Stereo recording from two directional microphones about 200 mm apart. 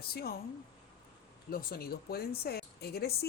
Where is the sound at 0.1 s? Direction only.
50° left (ahead or behind).